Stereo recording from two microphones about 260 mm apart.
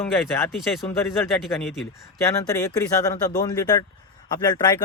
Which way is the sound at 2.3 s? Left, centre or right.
Centre.